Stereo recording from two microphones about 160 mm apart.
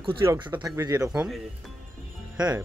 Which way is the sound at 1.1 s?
5° right (ahead or behind).